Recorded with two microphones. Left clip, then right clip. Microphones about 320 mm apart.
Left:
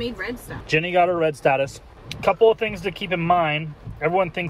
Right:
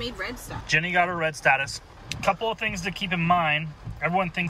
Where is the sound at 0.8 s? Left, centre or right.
Left.